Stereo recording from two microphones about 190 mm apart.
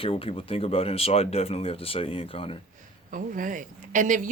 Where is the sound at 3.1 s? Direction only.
45° right (ahead or behind).